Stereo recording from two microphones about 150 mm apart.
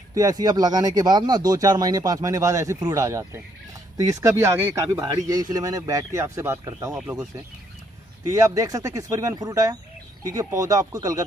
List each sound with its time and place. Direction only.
0.1 s speech: 25° right (ahead or behind)
8.3 s speech: 20° right (ahead or behind)